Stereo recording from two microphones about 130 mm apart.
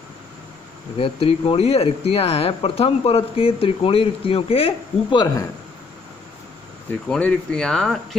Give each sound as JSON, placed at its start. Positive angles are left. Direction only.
{"t": 0.9, "sound": "speech", "side_deg": 45}
{"t": 7.1, "sound": "speech", "side_deg": 10}